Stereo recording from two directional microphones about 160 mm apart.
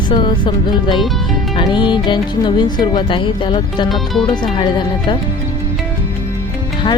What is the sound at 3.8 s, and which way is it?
Speech, centre (ahead or behind).